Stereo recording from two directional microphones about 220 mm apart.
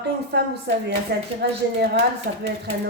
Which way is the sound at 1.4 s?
50° right (ahead or behind).